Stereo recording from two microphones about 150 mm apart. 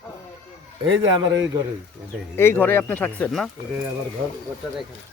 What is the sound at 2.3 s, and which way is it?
Speech, 15° left (ahead or behind).